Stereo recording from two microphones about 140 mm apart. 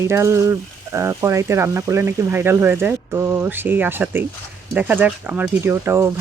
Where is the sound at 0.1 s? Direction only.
20° right (ahead or behind).